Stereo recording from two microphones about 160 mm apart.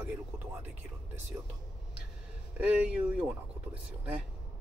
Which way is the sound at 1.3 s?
15° right (ahead or behind).